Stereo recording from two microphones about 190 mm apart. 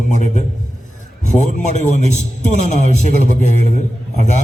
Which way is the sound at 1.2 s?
40° left (ahead or behind).